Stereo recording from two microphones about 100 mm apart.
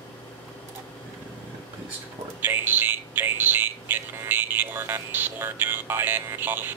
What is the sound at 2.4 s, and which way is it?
Speech, 20° right (ahead or behind).